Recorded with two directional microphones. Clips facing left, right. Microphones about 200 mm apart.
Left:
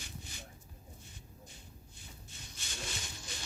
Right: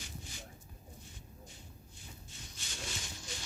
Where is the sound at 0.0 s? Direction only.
60° left (ahead or behind).